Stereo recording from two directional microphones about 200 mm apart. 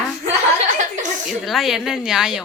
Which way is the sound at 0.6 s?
40° right (ahead or behind).